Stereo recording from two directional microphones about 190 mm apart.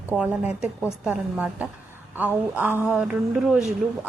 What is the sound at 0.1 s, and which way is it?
A woman's voice, 5° right (ahead or behind).